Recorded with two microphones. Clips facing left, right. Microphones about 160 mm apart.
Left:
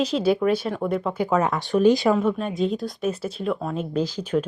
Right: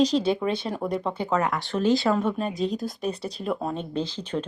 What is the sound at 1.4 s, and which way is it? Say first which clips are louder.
Speech: left 6 dB; 20° left (ahead or behind).